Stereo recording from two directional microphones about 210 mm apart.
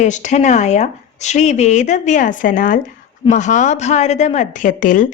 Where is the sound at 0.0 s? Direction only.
35° left (ahead or behind).